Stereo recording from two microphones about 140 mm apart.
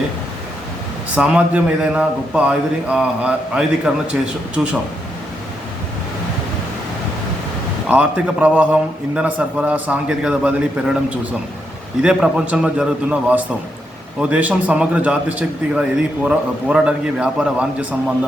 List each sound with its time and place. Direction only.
1.1 s a man's voice: 10° right (ahead or behind)
7.9 s a man's voice: 10° right (ahead or behind)